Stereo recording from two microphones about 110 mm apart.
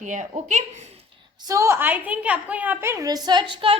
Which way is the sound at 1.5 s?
25° right (ahead or behind).